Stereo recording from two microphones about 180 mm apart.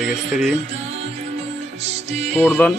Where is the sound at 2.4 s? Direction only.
10° left (ahead or behind).